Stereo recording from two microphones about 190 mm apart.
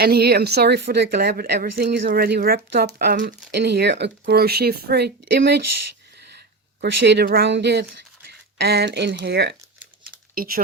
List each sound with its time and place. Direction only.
0.0 s speech: 55° right (ahead or behind)
7.0 s speech: 60° right (ahead or behind)
10.3 s speech: 50° right (ahead or behind)